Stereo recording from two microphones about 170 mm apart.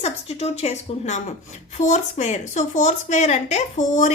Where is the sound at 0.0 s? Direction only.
40° left (ahead or behind).